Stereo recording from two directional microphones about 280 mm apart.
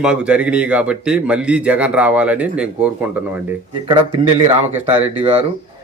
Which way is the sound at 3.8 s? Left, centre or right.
Right.